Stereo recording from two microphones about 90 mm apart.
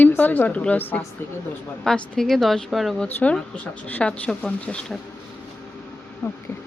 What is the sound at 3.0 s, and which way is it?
Speech, 15° left (ahead or behind).